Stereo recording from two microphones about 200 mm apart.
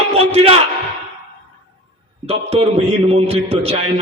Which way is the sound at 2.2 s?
30° right (ahead or behind).